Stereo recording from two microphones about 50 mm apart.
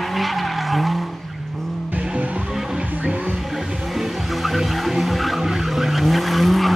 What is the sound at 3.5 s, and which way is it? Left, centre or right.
Vehicle, centre.